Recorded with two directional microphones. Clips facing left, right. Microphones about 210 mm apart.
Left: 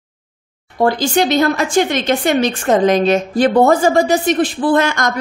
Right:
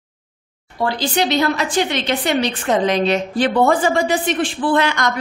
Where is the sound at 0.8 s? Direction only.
45° left (ahead or behind).